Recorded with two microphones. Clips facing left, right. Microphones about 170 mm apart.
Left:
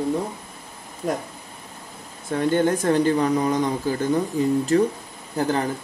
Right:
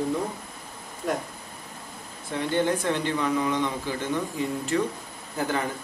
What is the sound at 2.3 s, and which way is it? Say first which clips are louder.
Speech: left 5 dB; 45° left (ahead or behind).